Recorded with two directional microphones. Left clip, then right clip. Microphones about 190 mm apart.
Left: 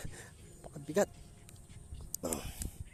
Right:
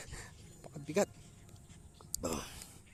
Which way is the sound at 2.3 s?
20° right (ahead or behind).